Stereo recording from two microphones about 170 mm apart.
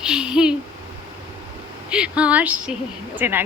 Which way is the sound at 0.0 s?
5° right (ahead or behind).